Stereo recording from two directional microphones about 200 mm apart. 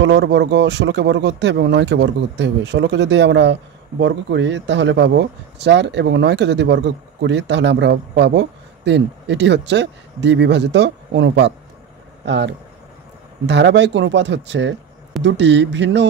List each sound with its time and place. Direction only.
0.0 s a man's voice: 60° right (ahead or behind)
13.5 s a man's voice: 60° right (ahead or behind)